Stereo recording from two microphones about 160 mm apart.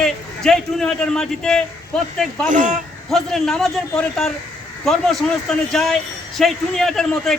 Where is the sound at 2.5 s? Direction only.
55° right (ahead or behind).